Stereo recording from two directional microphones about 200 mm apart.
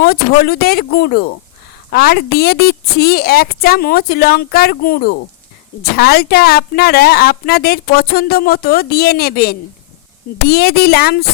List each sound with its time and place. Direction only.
0.0 s a woman's voice: 50° left (ahead or behind)